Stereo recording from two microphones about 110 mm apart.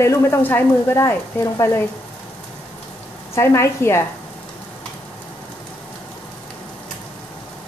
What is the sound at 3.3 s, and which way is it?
Speech, 25° left (ahead or behind).